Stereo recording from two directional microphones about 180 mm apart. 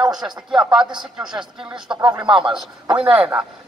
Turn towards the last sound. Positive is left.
turn(degrees=-5)  # may be behind; listen again after turning